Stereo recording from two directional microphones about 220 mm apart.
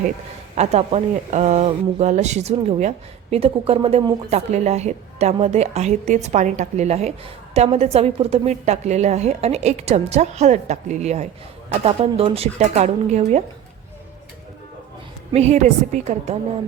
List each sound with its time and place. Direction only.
0.5 s a woman's voice: 30° right (ahead or behind)
15.3 s a woman's voice: 30° right (ahead or behind)